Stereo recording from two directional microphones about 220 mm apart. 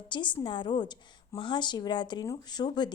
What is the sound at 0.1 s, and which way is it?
A woman's voice, 20° left (ahead or behind).